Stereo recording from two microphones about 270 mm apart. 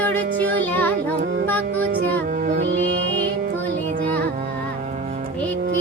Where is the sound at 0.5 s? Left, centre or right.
Centre.